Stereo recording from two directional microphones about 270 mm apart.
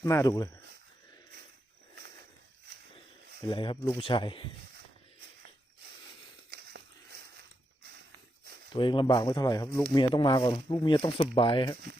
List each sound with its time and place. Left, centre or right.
0.0 s speech: centre
3.4 s speech: centre
6.5 s a sound: right
8.7 s speech: centre